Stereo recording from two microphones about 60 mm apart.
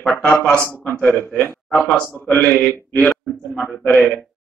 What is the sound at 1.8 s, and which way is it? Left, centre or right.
A man's voice, left.